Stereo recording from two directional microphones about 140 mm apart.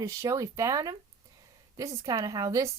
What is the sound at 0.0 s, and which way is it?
Speech, 20° right (ahead or behind).